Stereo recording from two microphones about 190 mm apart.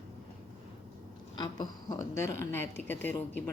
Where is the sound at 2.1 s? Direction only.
15° left (ahead or behind).